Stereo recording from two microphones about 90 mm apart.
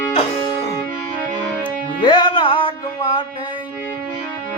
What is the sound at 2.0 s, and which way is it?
Music, 65° left (ahead or behind).